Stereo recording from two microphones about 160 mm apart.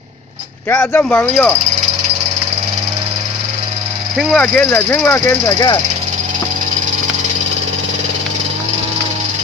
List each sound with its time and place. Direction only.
0.8 s speech: 10° left (ahead or behind)
4.2 s speech: 5° left (ahead or behind)
5.5 s speech: 25° left (ahead or behind)